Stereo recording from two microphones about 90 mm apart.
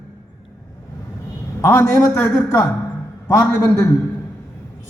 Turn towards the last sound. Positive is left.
turn(degrees=30)  # may be behind; listen again after turning